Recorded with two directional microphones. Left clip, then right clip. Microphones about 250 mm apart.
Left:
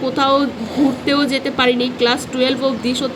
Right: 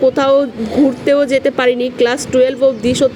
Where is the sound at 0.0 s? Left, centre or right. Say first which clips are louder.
Right 4 dB; right.